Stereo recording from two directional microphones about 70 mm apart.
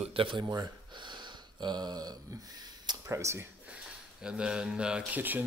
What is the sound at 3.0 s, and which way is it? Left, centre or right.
Speech, right.